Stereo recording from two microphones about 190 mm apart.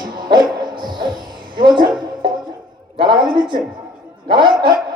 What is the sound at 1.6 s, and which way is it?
Speech, 25° right (ahead or behind).